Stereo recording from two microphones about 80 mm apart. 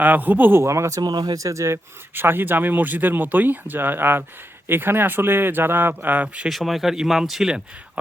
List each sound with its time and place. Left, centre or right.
0.0 s speech: right
1.0 s speech: right; by 6.5 s centre
6.5 s speech: centre